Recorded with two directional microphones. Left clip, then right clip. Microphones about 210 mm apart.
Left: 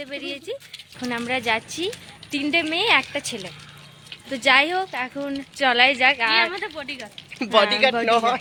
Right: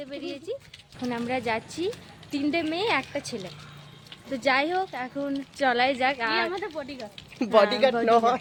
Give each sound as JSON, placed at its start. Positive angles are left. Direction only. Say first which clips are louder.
{"t": 0.0, "sound": "speech", "louder": "left 4 dB", "side_deg": 5}
{"t": 6.7, "sound": "speech", "louder": "left 3 dB", "side_deg": -15}
{"t": 7.5, "sound": "speech", "louder": "left 2 dB", "side_deg": 5}
{"t": 8.0, "sound": "a man's voice", "louder": "left 1 dB", "side_deg": -10}